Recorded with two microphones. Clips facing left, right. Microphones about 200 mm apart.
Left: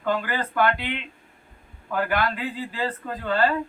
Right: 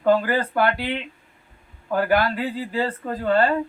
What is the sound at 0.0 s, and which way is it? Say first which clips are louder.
Speech: right 7 dB; 35° right (ahead or behind).